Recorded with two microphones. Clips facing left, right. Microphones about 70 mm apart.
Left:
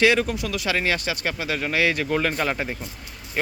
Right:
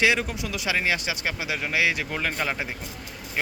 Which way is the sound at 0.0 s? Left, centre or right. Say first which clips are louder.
Left 4 dB; centre.